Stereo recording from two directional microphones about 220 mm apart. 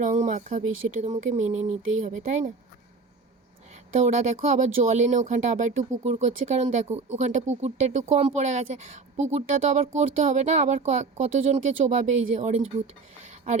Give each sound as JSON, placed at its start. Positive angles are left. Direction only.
{"t": 0.0, "sound": "a sound", "side_deg": -35}
{"t": 1.0, "sound": "speech", "side_deg": -30}
{"t": 3.9, "sound": "speech", "side_deg": -35}